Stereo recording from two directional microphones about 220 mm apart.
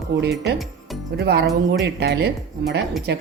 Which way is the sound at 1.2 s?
50° right (ahead or behind).